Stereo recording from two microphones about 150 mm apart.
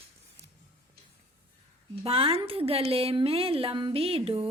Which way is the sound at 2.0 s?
40° right (ahead or behind).